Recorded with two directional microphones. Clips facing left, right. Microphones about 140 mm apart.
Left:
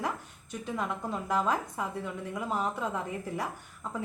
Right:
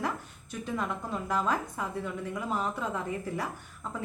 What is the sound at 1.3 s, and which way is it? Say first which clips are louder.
Speech: left 1 dB; 15° left (ahead or behind).